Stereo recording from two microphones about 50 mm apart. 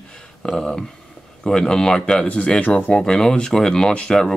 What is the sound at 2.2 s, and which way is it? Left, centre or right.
Speech, left.